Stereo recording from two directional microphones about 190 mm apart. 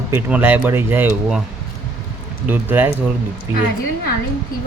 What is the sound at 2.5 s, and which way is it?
Speech, 10° right (ahead or behind).